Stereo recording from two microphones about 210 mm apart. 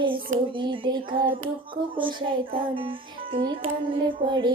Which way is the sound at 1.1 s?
45° right (ahead or behind).